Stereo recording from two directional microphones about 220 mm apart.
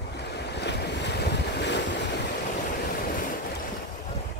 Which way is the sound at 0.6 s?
50° left (ahead or behind).